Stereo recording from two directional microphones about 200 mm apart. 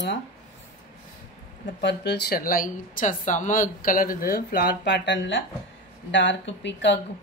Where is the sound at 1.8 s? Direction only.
60° left (ahead or behind).